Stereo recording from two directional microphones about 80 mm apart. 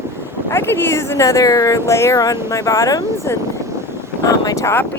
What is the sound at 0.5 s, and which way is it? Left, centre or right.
Speech, left.